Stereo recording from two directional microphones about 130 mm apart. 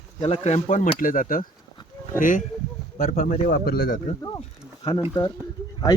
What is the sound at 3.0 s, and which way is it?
Speech, 70° left (ahead or behind).